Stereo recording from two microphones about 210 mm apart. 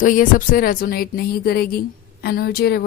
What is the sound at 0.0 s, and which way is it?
A woman's voice, 40° left (ahead or behind).